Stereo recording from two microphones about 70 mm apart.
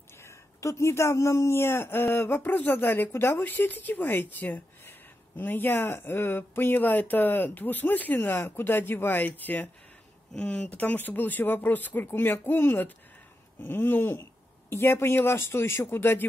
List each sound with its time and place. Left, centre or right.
0.2 s a man's voice: left